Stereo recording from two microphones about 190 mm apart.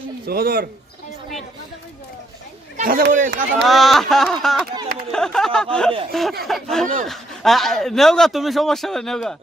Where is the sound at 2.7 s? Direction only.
50° right (ahead or behind).